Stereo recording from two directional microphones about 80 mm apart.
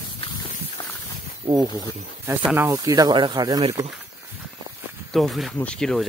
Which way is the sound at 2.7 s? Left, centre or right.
Right.